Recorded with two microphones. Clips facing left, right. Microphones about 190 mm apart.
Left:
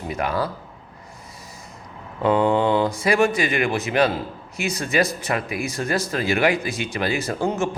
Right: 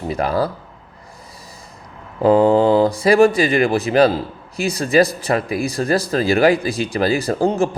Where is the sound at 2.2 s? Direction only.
35° right (ahead or behind).